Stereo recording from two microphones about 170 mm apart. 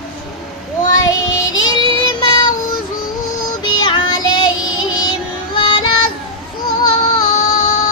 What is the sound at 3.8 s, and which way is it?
Music, 25° left (ahead or behind).